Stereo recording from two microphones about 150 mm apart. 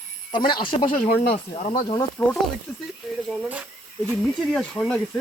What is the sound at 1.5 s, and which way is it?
Speech, 40° left (ahead or behind).